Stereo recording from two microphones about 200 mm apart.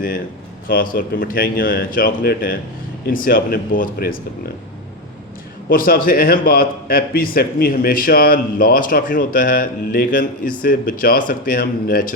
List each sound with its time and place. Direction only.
0.7 s a man's voice: 45° left (ahead or behind)
5.6 s a man's voice: 45° left (ahead or behind)